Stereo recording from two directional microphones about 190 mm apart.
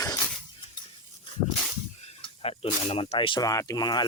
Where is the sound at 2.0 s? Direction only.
30° left (ahead or behind).